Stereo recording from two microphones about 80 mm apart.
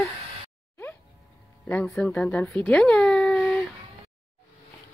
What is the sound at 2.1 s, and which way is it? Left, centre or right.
Speech, centre.